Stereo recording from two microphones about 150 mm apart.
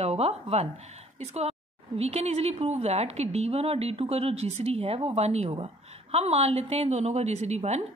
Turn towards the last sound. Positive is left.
turn(degrees=-45)  # may be behind; listen again after turning